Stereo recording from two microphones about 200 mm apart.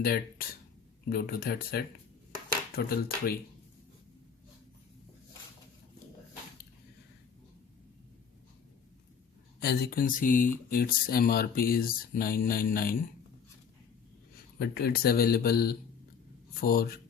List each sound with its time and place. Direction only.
0.0 s speech: 50° left (ahead or behind)
9.6 s speech: 50° left (ahead or behind)
14.6 s speech: 55° left (ahead or behind)